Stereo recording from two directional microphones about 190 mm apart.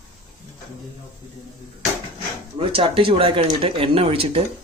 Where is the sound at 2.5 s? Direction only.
30° right (ahead or behind).